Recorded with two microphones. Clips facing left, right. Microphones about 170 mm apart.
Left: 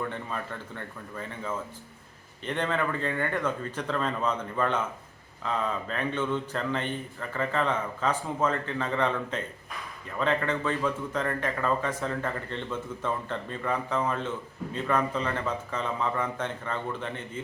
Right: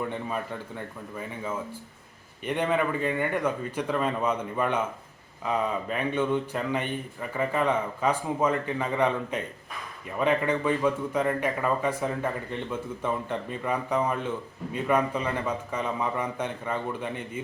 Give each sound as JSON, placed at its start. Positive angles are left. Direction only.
{"t": 0.0, "sound": "speech", "side_deg": -15}
{"t": 2.4, "sound": "speech", "side_deg": -10}